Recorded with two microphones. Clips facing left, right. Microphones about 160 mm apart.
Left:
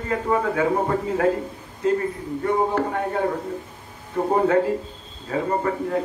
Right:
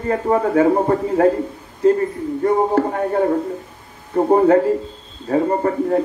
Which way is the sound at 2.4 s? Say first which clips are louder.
Right 5 dB; 40° right (ahead or behind).